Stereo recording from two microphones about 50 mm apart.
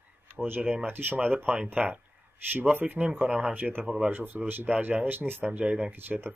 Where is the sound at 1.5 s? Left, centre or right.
Right.